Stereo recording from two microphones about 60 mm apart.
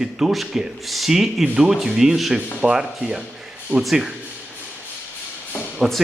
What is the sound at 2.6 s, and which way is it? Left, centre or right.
Speech, centre.